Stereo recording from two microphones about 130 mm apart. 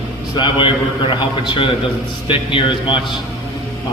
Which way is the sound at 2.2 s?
40° left (ahead or behind).